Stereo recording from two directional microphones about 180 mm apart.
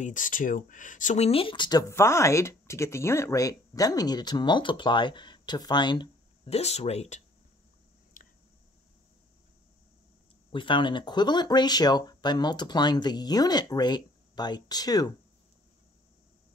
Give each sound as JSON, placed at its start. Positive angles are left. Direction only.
{"t": 0.0, "sound": "speech", "side_deg": 45}
{"t": 8.2, "sound": "squish", "side_deg": 50}
{"t": 10.5, "sound": "speech", "side_deg": 25}